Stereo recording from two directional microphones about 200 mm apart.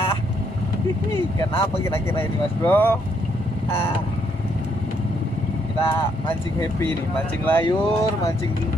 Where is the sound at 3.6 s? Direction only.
10° left (ahead or behind).